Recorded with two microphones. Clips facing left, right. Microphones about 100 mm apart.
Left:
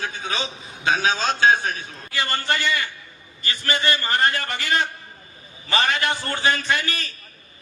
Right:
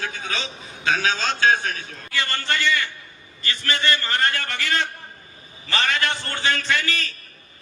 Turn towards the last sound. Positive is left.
turn(degrees=20)  # may be behind; listen again after turning